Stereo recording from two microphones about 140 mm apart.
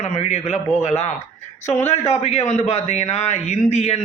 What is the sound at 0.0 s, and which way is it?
A man's voice, 50° left (ahead or behind).